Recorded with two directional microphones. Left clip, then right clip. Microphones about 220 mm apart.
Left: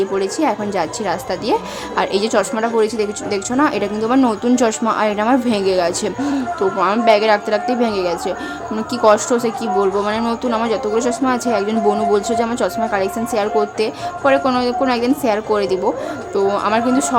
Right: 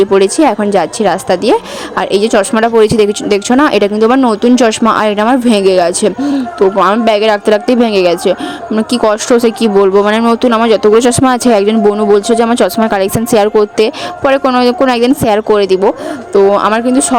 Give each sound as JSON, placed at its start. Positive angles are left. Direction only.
{"t": 0.1, "sound": "a woman's voice", "side_deg": -35}